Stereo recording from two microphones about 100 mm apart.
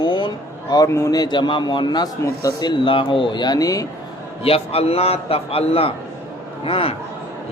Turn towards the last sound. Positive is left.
turn(degrees=70)  # may be behind; listen again after turning